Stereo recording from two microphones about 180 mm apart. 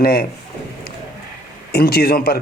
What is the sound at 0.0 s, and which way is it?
Speech, 60° left (ahead or behind).